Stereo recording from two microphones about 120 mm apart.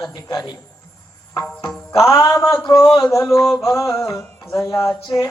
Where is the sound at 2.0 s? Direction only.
25° left (ahead or behind).